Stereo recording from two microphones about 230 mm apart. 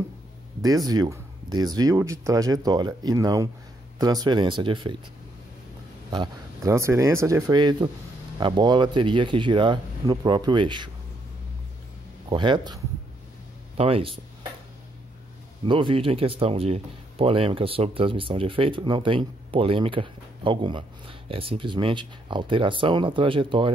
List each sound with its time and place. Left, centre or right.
0.6 s speech: centre
6.1 s speech: centre
12.3 s speech: centre
13.7 s speech: right
15.6 s speech: right